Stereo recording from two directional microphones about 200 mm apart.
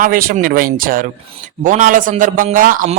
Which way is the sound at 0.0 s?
45° right (ahead or behind).